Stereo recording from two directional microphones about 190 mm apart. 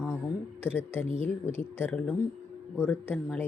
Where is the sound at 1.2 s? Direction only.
10° left (ahead or behind).